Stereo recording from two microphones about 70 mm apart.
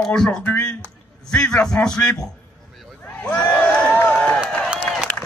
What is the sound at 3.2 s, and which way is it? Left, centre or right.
Crowd, centre.